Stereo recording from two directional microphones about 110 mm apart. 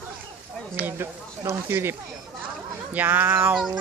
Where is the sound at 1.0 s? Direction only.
20° right (ahead or behind).